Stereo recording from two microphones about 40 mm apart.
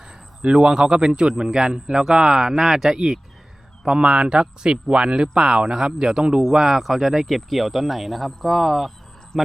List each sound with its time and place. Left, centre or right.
0.0 s a man's voice: right
2.5 s speech: centre
3.8 s speech: right; by 9.5 s centre